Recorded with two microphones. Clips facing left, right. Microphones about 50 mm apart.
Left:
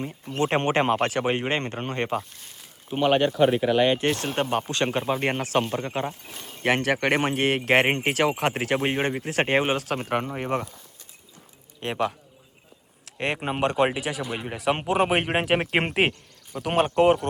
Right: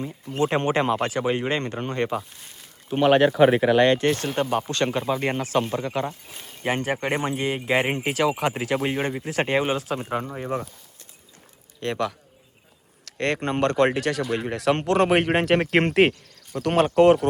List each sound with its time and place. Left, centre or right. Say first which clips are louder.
0.5 s speech: left 1 dB; left
2.3 s speech: right 1 dB; centre
4.0 s speech: right 2 dB; left
5.2 s speech: even; left
6.6 s speech: left 2 dB; left
11.8 s speech: even; left
13.1 s speech: right 3 dB; centre